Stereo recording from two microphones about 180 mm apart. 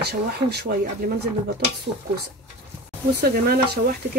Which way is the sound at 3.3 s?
60° right (ahead or behind).